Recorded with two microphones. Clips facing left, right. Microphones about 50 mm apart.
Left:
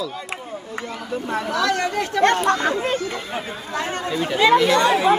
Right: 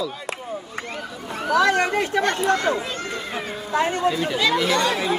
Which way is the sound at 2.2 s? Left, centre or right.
Left.